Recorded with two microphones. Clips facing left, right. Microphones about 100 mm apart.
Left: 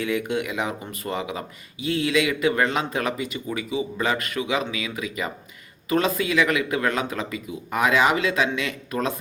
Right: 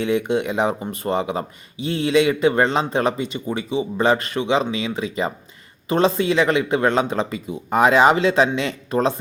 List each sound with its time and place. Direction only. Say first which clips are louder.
0.0 s speech: right 5 dB; 25° right (ahead or behind)